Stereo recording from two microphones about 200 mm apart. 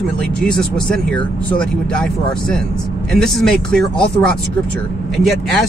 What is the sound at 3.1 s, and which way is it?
Speech, centre (ahead or behind).